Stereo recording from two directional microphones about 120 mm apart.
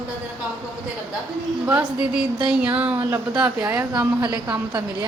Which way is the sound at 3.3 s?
5° right (ahead or behind).